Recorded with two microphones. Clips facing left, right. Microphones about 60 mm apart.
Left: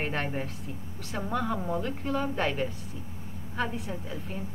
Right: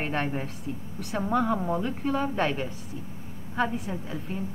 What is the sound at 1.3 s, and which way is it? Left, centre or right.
A woman's voice, right.